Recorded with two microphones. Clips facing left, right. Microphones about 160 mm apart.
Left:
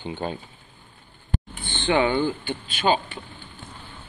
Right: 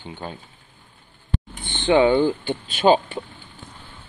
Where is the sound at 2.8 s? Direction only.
40° right (ahead or behind).